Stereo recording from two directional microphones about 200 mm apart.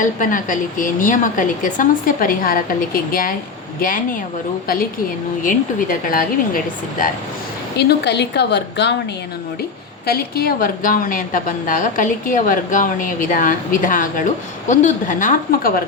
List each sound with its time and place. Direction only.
0.0 s a woman's voice: 40° left (ahead or behind)
5.4 s a woman's voice: 45° left (ahead or behind)
7.8 s a woman's voice: 55° left (ahead or behind)
10.1 s a woman's voice: 50° left (ahead or behind)